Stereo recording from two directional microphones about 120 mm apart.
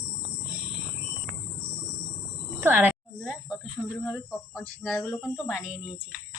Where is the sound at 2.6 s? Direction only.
15° right (ahead or behind).